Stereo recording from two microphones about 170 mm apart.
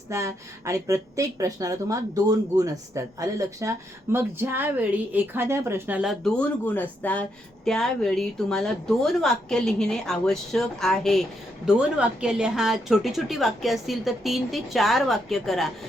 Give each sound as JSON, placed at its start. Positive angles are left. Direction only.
{"t": 0.1, "sound": "speech", "side_deg": -15}
{"t": 6.0, "sound": "a woman's voice", "side_deg": 0}